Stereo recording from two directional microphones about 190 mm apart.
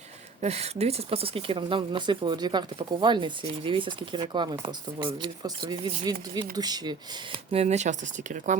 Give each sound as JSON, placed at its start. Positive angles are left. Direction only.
{"t": 0.4, "sound": "speech", "side_deg": -35}
{"t": 7.5, "sound": "speech", "side_deg": -35}